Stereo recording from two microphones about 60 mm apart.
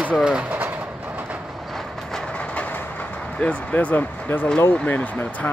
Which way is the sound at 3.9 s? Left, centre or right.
Left.